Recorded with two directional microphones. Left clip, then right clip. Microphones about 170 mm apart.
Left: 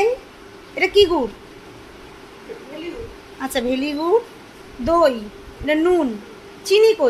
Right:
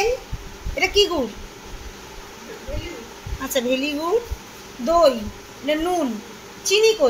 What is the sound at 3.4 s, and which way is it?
Speech, 35° left (ahead or behind).